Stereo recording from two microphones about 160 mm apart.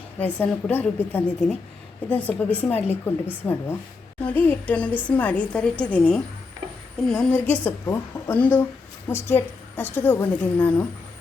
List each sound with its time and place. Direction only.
0.2 s a woman's voice: 10° left (ahead or behind)
2.7 s a woman's voice: 40° left (ahead or behind)
3.2 s a woman's voice: 15° left (ahead or behind)